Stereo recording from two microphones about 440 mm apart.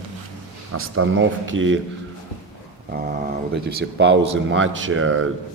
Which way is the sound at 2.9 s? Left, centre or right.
Right.